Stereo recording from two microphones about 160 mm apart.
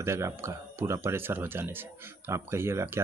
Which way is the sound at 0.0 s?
15° right (ahead or behind).